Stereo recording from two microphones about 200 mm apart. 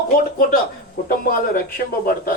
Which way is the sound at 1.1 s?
50° left (ahead or behind).